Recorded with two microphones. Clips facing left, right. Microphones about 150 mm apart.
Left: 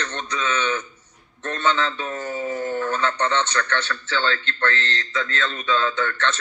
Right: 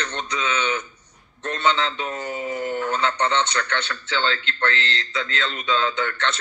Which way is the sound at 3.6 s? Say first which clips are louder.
Left 2 dB; 15° right (ahead or behind).